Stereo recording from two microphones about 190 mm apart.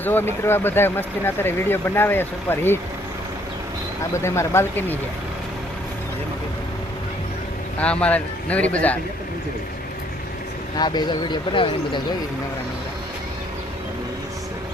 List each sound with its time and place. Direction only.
0.0 s speech: 10° left (ahead or behind)
4.1 s speech: 15° left (ahead or behind)
7.8 s speech: 5° left (ahead or behind)
10.8 s speech: 25° left (ahead or behind)